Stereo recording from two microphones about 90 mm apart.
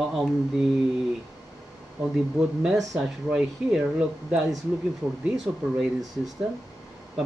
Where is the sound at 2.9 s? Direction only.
5° right (ahead or behind).